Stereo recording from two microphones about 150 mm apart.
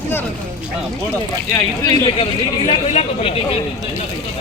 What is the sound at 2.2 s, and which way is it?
Speech, 40° left (ahead or behind).